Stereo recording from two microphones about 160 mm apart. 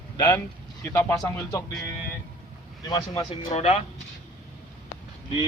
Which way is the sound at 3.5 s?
45° left (ahead or behind).